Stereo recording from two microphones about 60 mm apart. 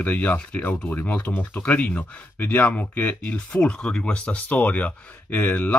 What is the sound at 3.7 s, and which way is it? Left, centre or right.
Speech, centre.